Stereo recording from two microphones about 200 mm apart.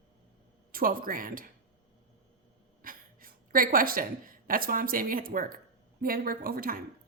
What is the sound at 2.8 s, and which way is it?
A woman's voice, 45° right (ahead or behind).